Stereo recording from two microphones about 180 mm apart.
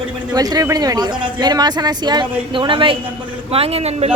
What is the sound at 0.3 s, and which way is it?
Speech, 20° right (ahead or behind).